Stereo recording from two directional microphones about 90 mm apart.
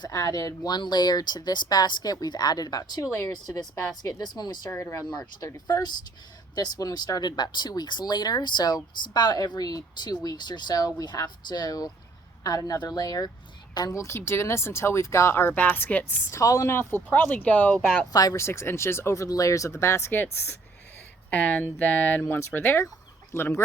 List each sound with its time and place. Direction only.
0.0 s speech: 40° left (ahead or behind)
4.7 s speech: 30° left (ahead or behind)
5.4 s speech: 45° left (ahead or behind); by 16.1 s 20° left (ahead or behind)
16.3 s speech: 35° left (ahead or behind)
16.7 s speech: 25° left (ahead or behind)
18.1 s speech: 45° left (ahead or behind)
18.3 s speech: 30° left (ahead or behind)